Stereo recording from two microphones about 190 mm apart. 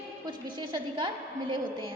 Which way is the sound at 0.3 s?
25° right (ahead or behind).